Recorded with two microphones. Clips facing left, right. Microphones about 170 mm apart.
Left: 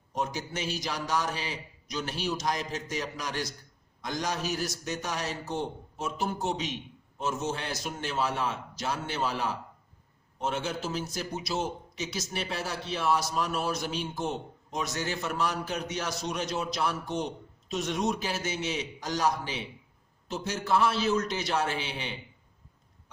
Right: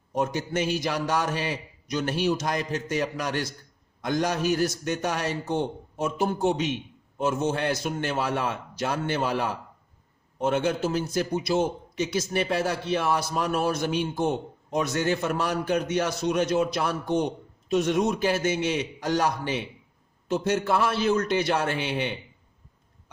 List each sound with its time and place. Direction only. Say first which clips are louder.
0.1 s a man's voice: right 6 dB; 55° right (ahead or behind)